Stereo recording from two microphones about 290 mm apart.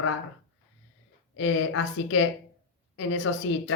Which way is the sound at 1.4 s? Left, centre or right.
Left.